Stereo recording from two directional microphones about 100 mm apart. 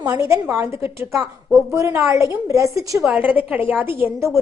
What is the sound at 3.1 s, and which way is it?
A woman's voice, 15° right (ahead or behind).